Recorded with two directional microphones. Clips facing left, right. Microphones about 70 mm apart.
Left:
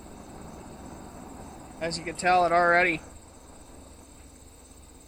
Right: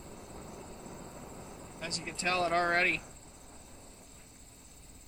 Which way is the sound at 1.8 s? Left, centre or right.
Left.